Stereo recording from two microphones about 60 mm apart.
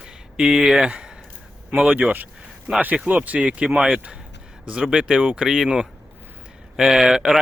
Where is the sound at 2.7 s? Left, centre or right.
Right.